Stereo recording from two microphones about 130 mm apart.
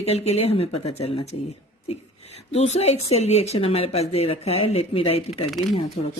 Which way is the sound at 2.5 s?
55° left (ahead or behind).